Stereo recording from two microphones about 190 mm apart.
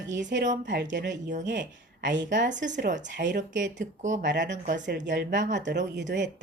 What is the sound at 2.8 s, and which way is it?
Speech, 40° right (ahead or behind).